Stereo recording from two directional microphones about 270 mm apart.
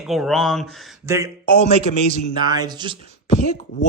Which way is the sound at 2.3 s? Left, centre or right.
Centre.